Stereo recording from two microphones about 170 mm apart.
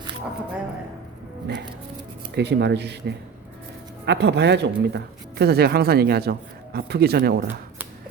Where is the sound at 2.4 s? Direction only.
90° right; by 7.4 s 65° right (ahead or behind).